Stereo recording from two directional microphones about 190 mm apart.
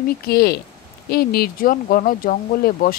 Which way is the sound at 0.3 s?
55° left (ahead or behind).